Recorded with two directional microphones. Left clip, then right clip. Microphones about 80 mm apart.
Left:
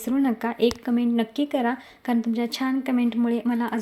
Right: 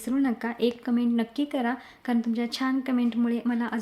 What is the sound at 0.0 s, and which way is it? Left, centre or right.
A woman's voice, left.